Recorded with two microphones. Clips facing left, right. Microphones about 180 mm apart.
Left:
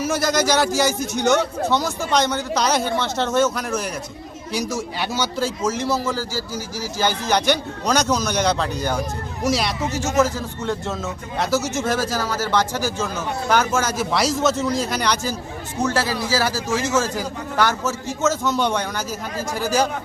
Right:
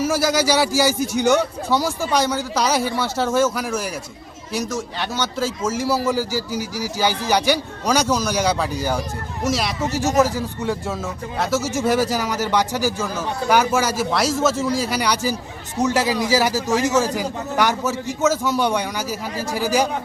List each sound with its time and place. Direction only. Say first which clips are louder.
0.1 s a man's voice: right 1 dB; 5° right (ahead or behind)
10.2 s a man's voice: even; 15° right (ahead or behind)